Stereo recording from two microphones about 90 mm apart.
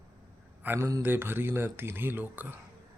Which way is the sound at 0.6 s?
25° right (ahead or behind).